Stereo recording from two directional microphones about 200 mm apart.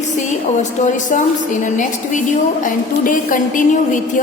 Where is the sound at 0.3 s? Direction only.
35° left (ahead or behind).